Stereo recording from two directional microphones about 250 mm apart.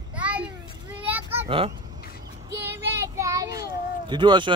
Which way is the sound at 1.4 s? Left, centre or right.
Right.